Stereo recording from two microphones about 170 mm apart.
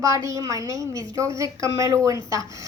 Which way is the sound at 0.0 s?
20° right (ahead or behind).